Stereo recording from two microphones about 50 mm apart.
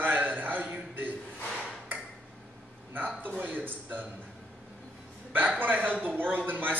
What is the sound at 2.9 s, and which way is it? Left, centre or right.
A man's voice, right.